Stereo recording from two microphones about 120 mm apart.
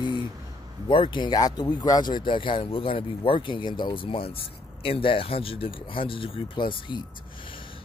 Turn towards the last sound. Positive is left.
turn(degrees=40)  # may be behind; listen again after turning